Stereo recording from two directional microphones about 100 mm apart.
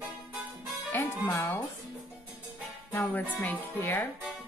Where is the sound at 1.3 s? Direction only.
30° left (ahead or behind).